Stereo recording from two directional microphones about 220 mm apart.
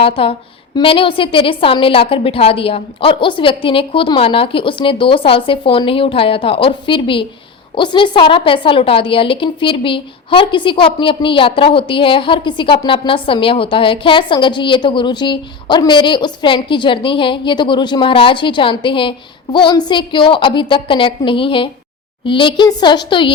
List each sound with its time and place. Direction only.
0.0 s a woman's voice: 25° left (ahead or behind)